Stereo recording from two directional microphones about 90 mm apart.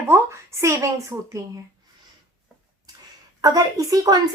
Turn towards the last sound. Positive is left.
turn(degrees=-45)  # may be behind; listen again after turning